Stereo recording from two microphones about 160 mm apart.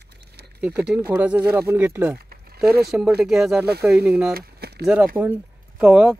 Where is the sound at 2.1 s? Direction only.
75° right (ahead or behind).